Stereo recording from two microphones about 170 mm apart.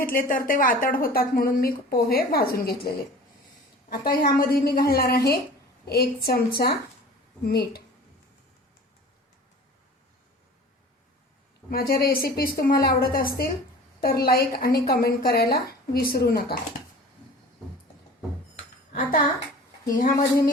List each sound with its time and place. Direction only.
0.0 s a woman's voice: 55° left (ahead or behind)
11.7 s speech: 60° left (ahead or behind)
19.9 s speech: 50° left (ahead or behind)